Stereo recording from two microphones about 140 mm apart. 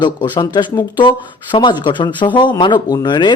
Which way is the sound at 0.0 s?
30° left (ahead or behind).